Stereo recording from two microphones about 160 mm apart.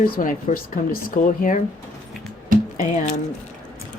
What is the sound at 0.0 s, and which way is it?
Speech, 60° left (ahead or behind).